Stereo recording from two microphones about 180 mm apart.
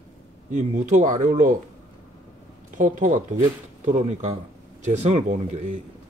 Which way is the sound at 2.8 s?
40° right (ahead or behind).